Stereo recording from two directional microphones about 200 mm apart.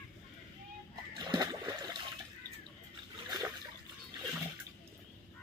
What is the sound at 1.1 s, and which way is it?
Splash, 20° right (ahead or behind).